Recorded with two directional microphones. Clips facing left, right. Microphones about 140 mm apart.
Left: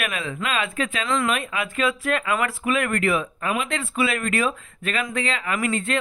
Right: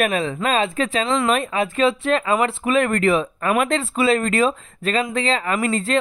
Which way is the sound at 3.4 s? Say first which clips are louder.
Right 6 dB; 55° right (ahead or behind).